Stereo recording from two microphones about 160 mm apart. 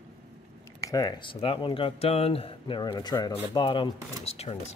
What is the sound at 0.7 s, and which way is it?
Speech, 20° left (ahead or behind).